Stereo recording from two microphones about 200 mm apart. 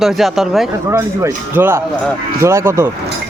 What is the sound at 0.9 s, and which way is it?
Speech, 10° right (ahead or behind).